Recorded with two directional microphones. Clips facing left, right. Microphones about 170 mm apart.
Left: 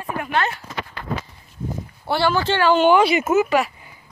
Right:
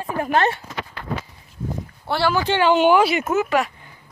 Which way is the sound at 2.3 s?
15° right (ahead or behind).